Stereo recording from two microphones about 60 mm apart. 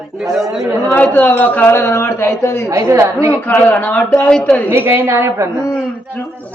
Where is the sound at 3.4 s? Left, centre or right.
Left.